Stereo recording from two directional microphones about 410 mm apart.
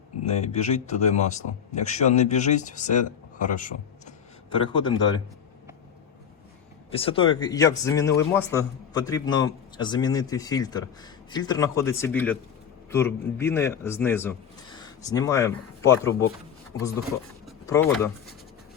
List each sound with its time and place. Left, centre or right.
0.3 s a man's voice: centre
6.9 s a man's voice: centre
17.4 s a sound: centre